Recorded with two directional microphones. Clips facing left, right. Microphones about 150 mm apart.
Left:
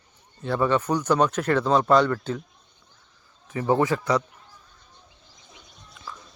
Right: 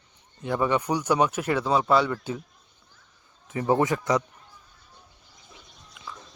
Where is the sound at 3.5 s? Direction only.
25° right (ahead or behind).